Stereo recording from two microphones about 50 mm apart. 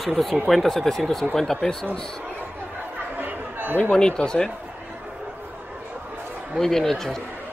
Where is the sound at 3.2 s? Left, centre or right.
Right.